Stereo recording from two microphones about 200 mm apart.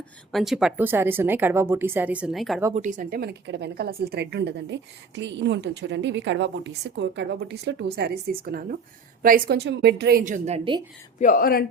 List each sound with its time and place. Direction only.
0.3 s a woman's voice: centre (ahead or behind)
2.7 s a woman's voice: 40° right (ahead or behind)
11.2 s speech: 45° left (ahead or behind)